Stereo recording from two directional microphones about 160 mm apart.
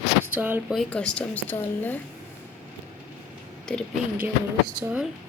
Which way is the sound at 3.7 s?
5° left (ahead or behind).